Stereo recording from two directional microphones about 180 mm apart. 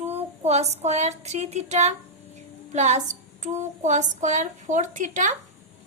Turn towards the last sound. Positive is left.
turn(degrees=-45)  # may be behind; listen again after turning